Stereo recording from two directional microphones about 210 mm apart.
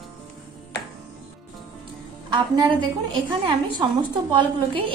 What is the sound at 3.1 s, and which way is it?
A woman's voice, 25° right (ahead or behind).